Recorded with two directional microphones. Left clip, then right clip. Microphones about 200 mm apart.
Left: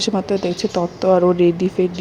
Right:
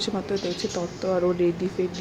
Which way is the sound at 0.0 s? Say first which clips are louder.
Left 8 dB; 30° left (ahead or behind).